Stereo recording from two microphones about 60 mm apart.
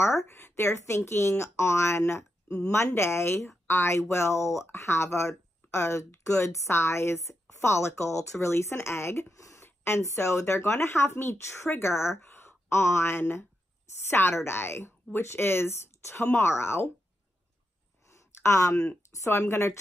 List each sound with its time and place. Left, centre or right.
0.0 s speech: left
9.4 s a sound: left
9.8 s a woman's voice: left
18.1 s speech: left